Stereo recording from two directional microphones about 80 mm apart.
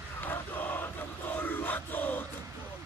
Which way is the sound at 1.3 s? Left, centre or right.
Left.